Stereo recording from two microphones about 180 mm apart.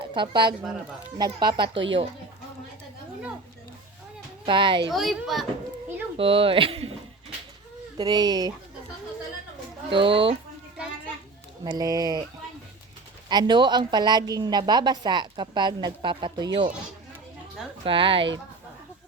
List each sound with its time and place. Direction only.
0.0 s a woman's voice: 25° right (ahead or behind)
4.4 s a woman's voice: 25° right (ahead or behind)
4.9 s a child's voice: centre (ahead or behind)
6.1 s speech: 30° right (ahead or behind)
7.9 s a woman's voice: 25° right (ahead or behind)
9.9 s a woman's voice: 30° right (ahead or behind)
11.6 s a woman's voice: 20° right (ahead or behind)
13.2 s a woman's voice: 25° right (ahead or behind)
17.8 s a woman's voice: 30° right (ahead or behind)